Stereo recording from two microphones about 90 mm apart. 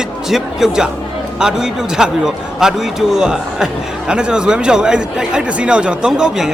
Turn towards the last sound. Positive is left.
turn(degrees=-5)  # may be behind; listen again after turning